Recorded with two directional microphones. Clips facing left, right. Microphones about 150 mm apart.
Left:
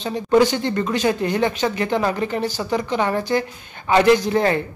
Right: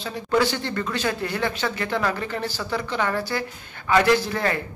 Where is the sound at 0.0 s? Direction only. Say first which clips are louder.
Left 6 dB; 20° left (ahead or behind).